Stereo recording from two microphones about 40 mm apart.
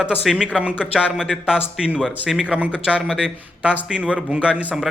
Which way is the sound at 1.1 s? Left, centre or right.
Centre.